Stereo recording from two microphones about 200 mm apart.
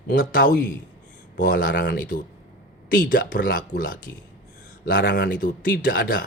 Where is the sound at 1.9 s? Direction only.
40° left (ahead or behind).